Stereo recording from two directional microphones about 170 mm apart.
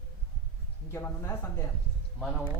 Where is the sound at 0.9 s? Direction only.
15° left (ahead or behind).